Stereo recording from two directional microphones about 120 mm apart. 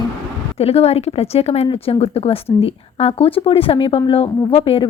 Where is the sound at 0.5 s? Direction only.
55° left (ahead or behind).